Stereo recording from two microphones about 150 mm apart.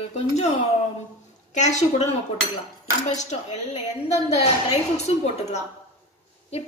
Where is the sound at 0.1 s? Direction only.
45° left (ahead or behind).